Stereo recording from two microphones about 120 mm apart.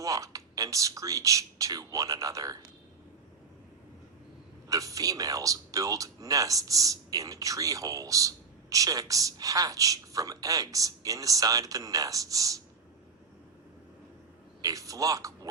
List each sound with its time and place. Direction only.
0.0 s speech: 30° right (ahead or behind)
4.7 s speech: 30° right (ahead or behind)
14.6 s speech: 30° right (ahead or behind)